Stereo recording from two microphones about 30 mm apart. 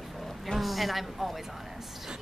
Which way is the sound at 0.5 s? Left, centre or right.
Centre.